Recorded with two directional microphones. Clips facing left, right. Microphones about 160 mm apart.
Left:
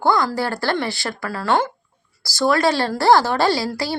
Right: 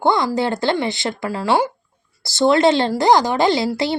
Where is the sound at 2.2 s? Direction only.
25° right (ahead or behind).